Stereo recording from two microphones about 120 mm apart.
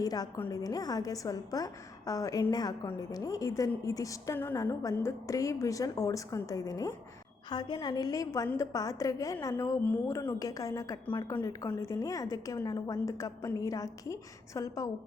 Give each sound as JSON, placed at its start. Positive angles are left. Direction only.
{"t": 0.0, "sound": "a woman's voice", "side_deg": 30}